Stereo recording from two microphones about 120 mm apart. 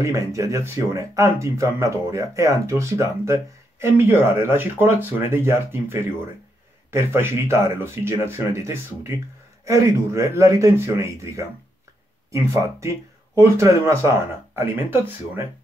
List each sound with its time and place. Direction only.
0.0 s speech: 25° right (ahead or behind)